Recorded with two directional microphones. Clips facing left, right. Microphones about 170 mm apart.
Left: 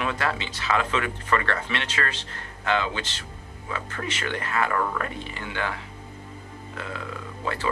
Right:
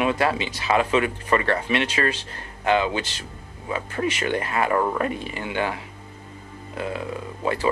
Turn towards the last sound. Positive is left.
turn(degrees=-15)  # may be behind; listen again after turning